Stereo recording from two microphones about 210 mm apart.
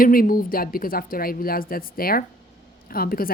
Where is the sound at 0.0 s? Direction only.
45° left (ahead or behind).